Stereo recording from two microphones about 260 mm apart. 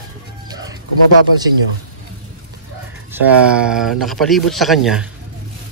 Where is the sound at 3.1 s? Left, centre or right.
Centre.